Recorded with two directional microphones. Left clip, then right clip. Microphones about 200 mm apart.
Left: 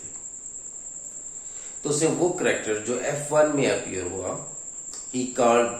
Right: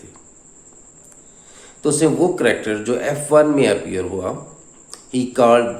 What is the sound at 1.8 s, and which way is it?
Speech, 45° right (ahead or behind).